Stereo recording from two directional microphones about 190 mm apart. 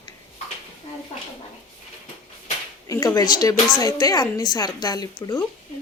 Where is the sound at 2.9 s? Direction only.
20° left (ahead or behind).